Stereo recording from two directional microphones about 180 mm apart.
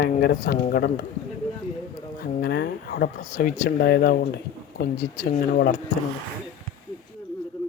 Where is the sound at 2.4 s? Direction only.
65° left (ahead or behind).